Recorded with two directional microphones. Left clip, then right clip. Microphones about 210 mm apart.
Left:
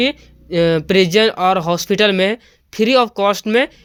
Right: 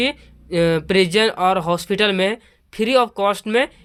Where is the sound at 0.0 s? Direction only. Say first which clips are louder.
Left 3 dB; 15° left (ahead or behind).